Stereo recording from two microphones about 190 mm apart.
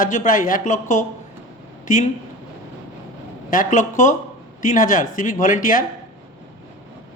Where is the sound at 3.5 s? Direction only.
45° left (ahead or behind).